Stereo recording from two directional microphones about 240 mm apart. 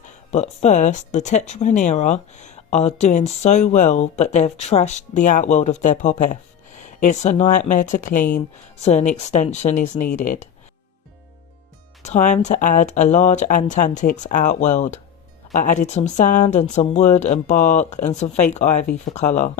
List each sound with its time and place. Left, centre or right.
0.3 s speech: left
12.0 s speech: left